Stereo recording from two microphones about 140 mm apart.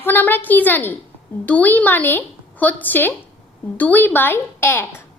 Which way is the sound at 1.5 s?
10° left (ahead or behind).